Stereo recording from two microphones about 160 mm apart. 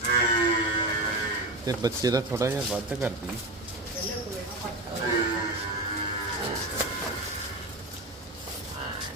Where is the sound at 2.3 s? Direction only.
15° right (ahead or behind).